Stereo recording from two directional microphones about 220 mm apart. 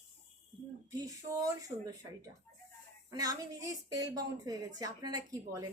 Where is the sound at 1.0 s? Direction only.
15° right (ahead or behind).